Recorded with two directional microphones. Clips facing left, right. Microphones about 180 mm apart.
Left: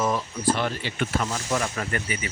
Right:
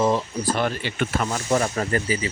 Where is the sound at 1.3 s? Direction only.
40° right (ahead or behind).